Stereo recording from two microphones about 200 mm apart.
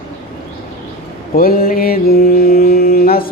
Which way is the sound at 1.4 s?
45° left (ahead or behind).